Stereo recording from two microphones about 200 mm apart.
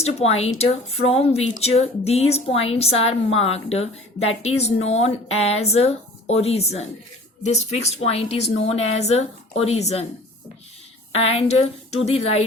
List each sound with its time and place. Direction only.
0.0 s a woman's voice: 30° left (ahead or behind)
11.1 s a woman's voice: 30° left (ahead or behind)